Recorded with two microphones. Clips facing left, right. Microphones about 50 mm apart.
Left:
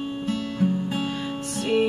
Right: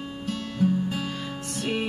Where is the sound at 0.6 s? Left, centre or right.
Centre.